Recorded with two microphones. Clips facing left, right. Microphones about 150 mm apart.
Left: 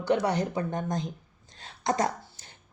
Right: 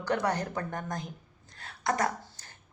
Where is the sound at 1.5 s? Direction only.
25° left (ahead or behind).